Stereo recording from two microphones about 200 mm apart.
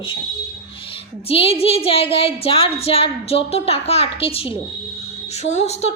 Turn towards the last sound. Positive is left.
turn(degrees=35)  # may be behind; listen again after turning